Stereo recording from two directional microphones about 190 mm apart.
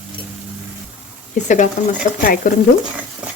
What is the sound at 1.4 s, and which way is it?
Speech, 40° left (ahead or behind).